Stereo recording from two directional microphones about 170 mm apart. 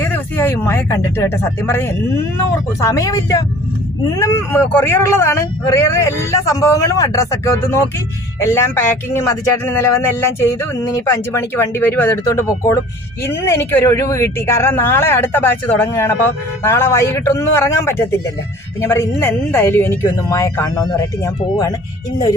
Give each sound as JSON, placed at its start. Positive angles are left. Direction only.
{"t": 0.0, "sound": "speech", "side_deg": 10}